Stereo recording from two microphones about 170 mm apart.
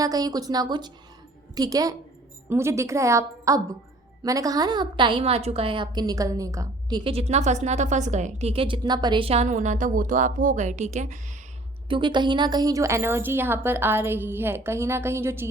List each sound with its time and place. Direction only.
0.0 s a woman's voice: 20° right (ahead or behind)
7.0 s a woman's voice: 35° right (ahead or behind)
11.9 s a woman's voice: 30° right (ahead or behind)